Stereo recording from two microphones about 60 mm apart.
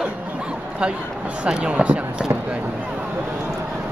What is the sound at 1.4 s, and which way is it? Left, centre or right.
Speech, centre.